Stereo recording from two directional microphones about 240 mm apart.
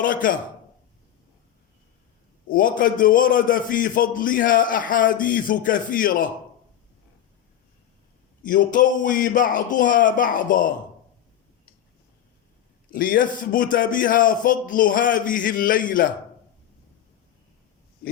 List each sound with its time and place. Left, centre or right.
0.0 s a man's voice: left
2.5 s a man's voice: left
8.4 s a man's voice: left
12.9 s a man's voice: left